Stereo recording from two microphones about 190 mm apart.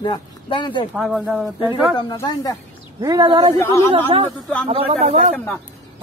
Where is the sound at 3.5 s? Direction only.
15° left (ahead or behind).